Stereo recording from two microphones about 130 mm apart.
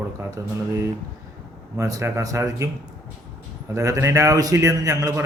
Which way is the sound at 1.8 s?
25° right (ahead or behind).